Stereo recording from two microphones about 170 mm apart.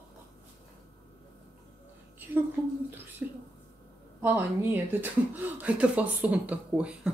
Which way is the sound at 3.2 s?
10° right (ahead or behind).